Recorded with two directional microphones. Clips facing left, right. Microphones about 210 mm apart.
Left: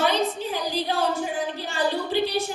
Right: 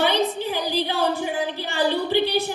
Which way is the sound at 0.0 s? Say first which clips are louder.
Right 2 dB; 65° right (ahead or behind).